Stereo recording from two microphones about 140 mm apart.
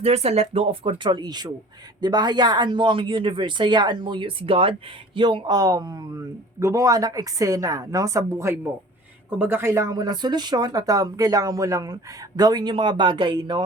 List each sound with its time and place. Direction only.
0.0 s speech: 50° right (ahead or behind); by 13.6 s 30° right (ahead or behind)